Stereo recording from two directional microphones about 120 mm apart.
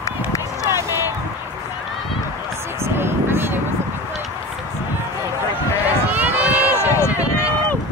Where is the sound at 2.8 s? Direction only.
20° right (ahead or behind).